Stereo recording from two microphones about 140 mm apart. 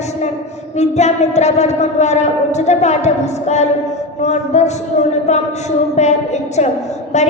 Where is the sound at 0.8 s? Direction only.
55° left (ahead or behind).